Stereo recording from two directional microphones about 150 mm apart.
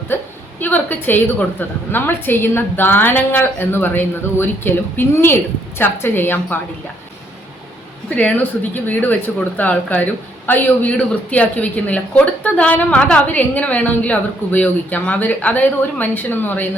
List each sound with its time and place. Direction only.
0.1 s a woman's voice: 15° left (ahead or behind)
8.1 s a woman's voice: 10° left (ahead or behind)